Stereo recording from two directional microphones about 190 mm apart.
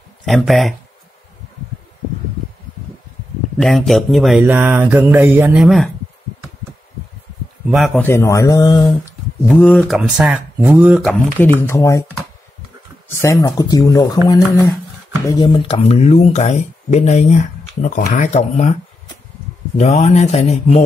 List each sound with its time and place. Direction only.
0.2 s speech: centre (ahead or behind)
3.5 s mantra: centre (ahead or behind)
7.6 s speech: centre (ahead or behind)
8.0 s speech: 15° left (ahead or behind); by 11.0 s 10° right (ahead or behind)
11.0 s speech: 10° left (ahead or behind)
13.1 s speech: 15° left (ahead or behind); by 18.8 s 35° left (ahead or behind)
19.8 s speech: 35° left (ahead or behind)